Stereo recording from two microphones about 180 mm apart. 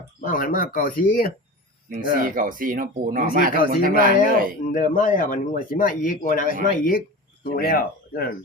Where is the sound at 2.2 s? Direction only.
50° right (ahead or behind).